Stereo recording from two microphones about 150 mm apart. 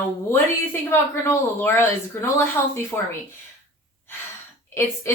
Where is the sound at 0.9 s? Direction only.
15° left (ahead or behind).